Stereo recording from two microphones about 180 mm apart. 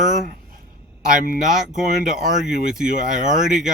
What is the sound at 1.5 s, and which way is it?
Speech, centre (ahead or behind).